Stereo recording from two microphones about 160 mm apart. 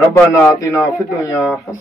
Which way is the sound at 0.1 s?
20° left (ahead or behind).